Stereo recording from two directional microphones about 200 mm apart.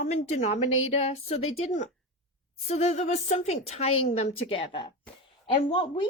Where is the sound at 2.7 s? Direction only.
35° left (ahead or behind).